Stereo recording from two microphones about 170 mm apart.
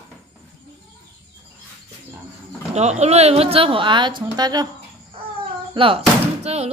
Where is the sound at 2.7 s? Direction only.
40° right (ahead or behind); by 4.6 s 25° right (ahead or behind).